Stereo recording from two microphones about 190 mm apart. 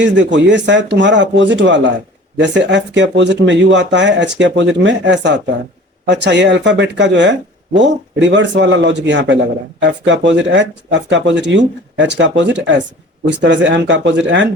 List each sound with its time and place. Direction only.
0.0 s speech: 70° right (ahead or behind)